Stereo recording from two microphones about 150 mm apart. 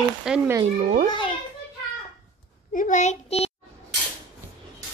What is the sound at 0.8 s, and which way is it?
Speech, 50° right (ahead or behind).